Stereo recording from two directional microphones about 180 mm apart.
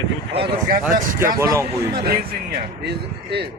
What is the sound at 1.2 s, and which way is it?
Speech, 15° right (ahead or behind).